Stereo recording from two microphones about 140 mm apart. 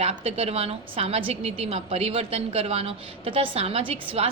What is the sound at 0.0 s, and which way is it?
A woman's voice, 45° right (ahead or behind).